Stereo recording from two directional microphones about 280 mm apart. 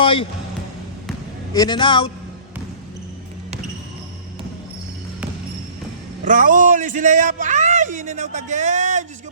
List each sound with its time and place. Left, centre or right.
0.0 s music: centre
1.5 s a man's voice: centre
6.2 s a man's voice: right